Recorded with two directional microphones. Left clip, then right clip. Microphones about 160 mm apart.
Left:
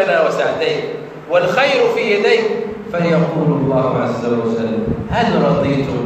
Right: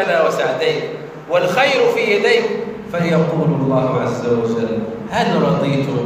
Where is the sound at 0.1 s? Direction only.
15° left (ahead or behind).